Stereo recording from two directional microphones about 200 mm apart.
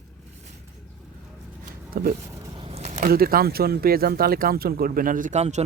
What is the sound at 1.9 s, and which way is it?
Speech, 45° right (ahead or behind).